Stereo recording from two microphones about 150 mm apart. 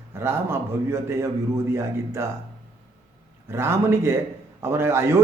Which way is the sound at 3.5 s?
15° right (ahead or behind).